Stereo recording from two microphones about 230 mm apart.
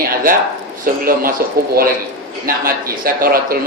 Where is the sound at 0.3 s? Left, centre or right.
Right.